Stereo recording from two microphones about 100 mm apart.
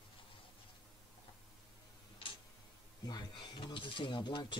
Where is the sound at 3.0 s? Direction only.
45° left (ahead or behind).